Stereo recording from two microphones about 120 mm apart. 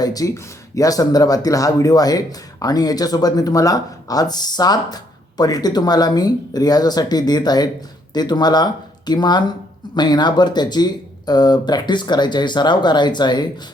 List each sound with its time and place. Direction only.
0.0 s speech: 30° left (ahead or behind)